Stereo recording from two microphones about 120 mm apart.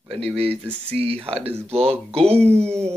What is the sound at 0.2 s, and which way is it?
Speech, 55° right (ahead or behind).